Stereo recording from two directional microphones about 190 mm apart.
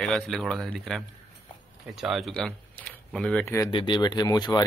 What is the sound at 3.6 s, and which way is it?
Speech, 25° left (ahead or behind).